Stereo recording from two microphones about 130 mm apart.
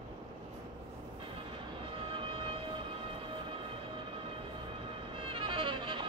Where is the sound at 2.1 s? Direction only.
45° right (ahead or behind).